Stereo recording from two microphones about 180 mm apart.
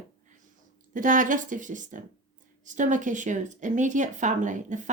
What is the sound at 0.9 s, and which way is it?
Speech, 45° right (ahead or behind).